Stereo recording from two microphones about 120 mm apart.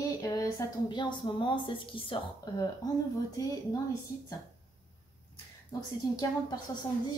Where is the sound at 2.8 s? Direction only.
35° left (ahead or behind).